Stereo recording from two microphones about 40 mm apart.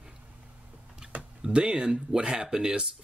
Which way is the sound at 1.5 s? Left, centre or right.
Right.